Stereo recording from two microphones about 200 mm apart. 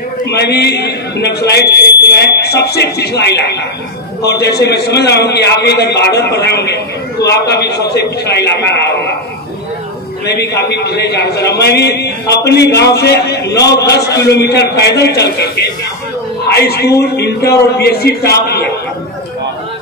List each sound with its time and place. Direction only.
0.3 s a man's voice: 55° left (ahead or behind)
10.2 s a man's voice: 55° left (ahead or behind)